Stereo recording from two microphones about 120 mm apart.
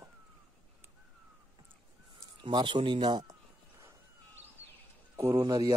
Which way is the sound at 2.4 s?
40° right (ahead or behind).